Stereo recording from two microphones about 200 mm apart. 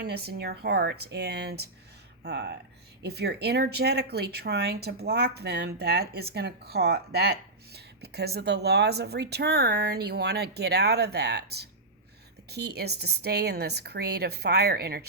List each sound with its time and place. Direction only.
0.0 s speech: 55° right (ahead or behind)